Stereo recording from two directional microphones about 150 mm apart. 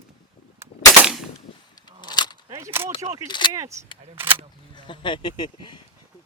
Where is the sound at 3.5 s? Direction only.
20° right (ahead or behind).